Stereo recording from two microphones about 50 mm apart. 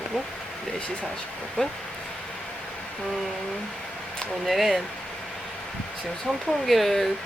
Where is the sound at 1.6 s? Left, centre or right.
Centre.